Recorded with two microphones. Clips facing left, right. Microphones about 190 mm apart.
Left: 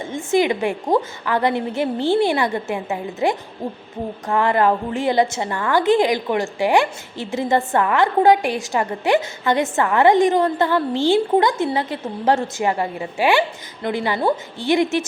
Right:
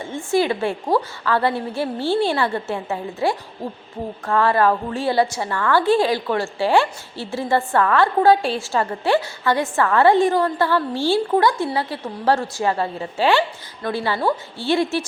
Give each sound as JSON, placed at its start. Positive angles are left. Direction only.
{"t": 0.0, "sound": "a woman's voice", "side_deg": 20}